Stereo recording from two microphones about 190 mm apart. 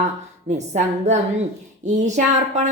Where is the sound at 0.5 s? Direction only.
35° right (ahead or behind).